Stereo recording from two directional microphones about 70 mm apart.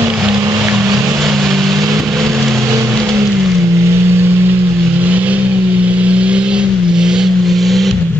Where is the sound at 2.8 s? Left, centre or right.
Right.